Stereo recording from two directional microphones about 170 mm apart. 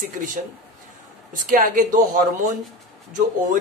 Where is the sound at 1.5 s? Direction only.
50° right (ahead or behind).